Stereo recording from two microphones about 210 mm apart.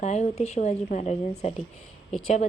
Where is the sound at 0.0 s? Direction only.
35° left (ahead or behind).